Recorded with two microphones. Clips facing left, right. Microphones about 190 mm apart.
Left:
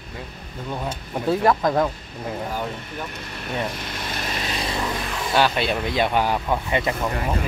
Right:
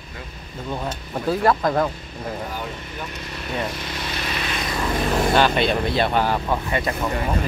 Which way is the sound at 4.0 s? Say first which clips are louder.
Even; 50° left (ahead or behind).